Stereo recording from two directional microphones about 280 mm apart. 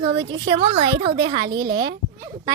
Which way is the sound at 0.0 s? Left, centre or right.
Centre.